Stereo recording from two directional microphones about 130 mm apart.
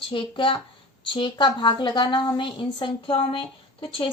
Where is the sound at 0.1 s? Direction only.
40° left (ahead or behind).